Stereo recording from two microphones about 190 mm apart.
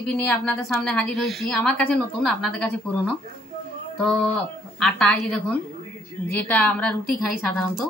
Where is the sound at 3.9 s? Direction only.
10° left (ahead or behind).